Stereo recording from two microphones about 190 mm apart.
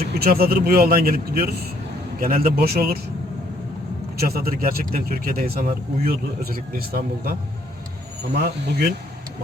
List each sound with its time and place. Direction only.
0.1 s speech: 55° right (ahead or behind)
4.2 s speech: 50° right (ahead or behind)